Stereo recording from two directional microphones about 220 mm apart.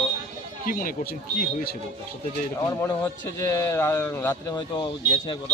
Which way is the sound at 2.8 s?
15° left (ahead or behind).